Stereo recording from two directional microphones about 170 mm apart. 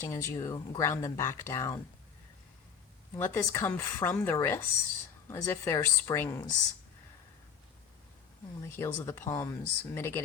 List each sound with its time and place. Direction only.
0.1 s speech: 20° left (ahead or behind)
3.2 s speech: 15° left (ahead or behind)
8.7 s speech: 15° left (ahead or behind)